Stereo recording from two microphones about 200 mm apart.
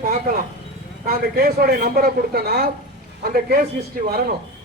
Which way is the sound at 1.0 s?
45° right (ahead or behind).